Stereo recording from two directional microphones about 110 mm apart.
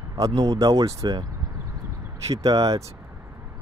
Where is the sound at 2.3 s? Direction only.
35° right (ahead or behind).